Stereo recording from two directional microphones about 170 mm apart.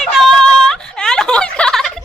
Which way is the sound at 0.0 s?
Centre (ahead or behind).